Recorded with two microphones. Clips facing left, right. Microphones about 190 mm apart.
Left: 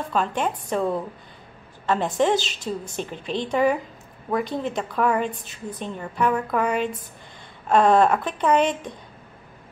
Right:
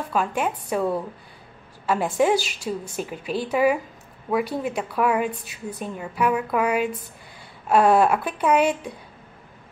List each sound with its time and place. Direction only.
0.1 s a woman's voice: 10° right (ahead or behind)